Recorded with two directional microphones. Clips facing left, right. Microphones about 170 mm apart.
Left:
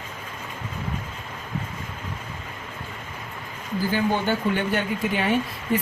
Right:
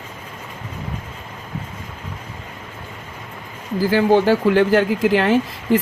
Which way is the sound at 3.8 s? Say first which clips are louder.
Right 9 dB; 90° right.